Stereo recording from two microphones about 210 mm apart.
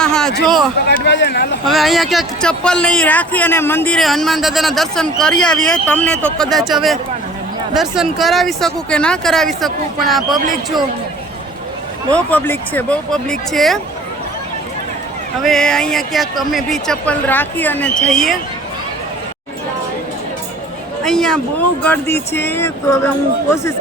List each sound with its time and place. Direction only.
0.0 s a sound: 5° left (ahead or behind)
0.9 s speech: 55° left (ahead or behind)
1.6 s speech: centre (ahead or behind)
12.1 s speech: 10° left (ahead or behind)
15.4 s speech: 5° left (ahead or behind)
21.0 s speech: centre (ahead or behind)